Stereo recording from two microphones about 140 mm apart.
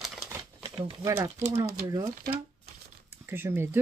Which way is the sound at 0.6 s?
40° right (ahead or behind).